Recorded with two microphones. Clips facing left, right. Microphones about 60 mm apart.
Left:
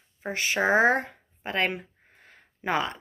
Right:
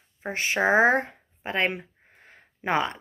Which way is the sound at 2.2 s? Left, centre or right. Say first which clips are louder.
Right 2 dB; right.